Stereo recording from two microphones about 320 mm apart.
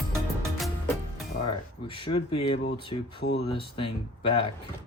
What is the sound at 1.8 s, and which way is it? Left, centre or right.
Speech, centre.